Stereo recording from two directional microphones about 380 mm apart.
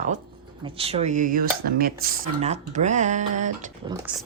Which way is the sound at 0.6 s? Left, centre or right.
Centre.